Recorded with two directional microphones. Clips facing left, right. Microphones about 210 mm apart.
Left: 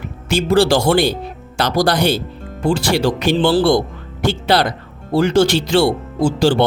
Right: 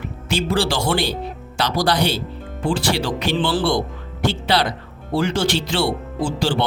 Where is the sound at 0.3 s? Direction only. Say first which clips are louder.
Left 7 dB; 45° left (ahead or behind).